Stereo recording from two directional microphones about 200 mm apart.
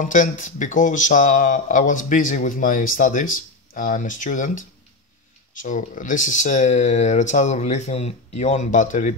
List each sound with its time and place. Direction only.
0.0 s speech: 40° left (ahead or behind)